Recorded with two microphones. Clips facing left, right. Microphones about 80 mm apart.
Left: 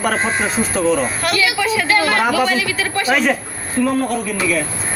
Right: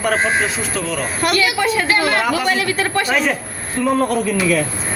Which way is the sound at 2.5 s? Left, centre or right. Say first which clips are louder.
Right 1 dB; right.